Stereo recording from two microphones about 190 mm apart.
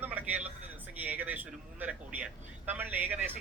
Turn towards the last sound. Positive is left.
turn(degrees=-10)  # may be behind; listen again after turning